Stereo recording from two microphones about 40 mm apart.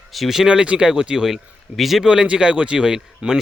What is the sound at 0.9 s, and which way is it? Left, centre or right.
Speech, centre.